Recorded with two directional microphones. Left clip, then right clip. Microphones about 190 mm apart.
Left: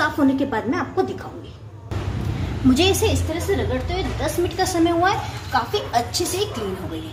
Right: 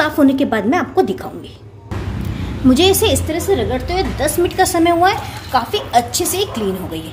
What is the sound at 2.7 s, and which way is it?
Speech, 35° right (ahead or behind).